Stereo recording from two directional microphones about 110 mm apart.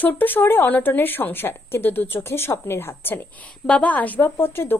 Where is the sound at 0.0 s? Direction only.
20° left (ahead or behind).